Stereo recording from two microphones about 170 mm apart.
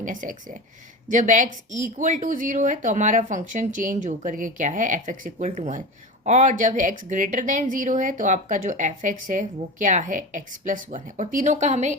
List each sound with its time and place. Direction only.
0.0 s a woman's voice: 50° right (ahead or behind)